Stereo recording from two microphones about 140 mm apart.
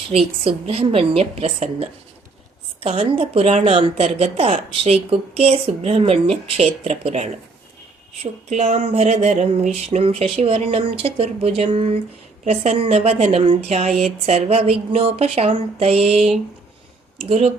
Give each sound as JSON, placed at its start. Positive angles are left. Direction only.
{"t": 0.1, "sound": "speech", "side_deg": -50}